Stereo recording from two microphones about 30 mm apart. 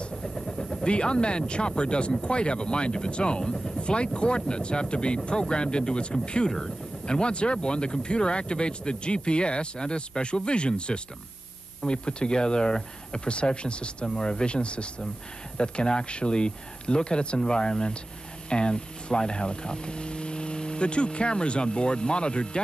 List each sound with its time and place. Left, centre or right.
0.6 s vehicle: left
0.8 s speech: left
14.0 s speech: left